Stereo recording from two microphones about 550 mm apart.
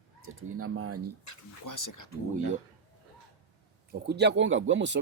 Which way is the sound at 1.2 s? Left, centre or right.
Left.